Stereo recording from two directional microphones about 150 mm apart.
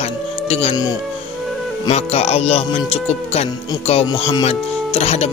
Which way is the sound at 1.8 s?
45° left (ahead or behind).